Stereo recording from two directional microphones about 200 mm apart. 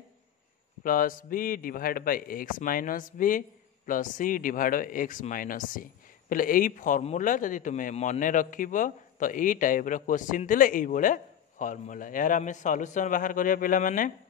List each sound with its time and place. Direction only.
0.8 s speech: 45° left (ahead or behind)